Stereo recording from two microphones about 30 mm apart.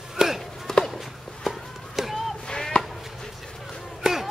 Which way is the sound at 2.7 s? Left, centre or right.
Left.